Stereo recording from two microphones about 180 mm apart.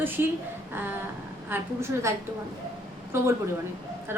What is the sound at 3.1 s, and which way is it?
Speech, 15° right (ahead or behind).